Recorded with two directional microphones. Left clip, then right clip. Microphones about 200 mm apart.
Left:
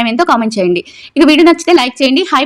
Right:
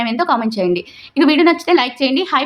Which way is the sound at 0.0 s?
30° left (ahead or behind).